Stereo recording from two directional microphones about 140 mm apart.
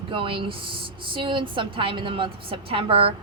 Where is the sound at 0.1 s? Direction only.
40° right (ahead or behind).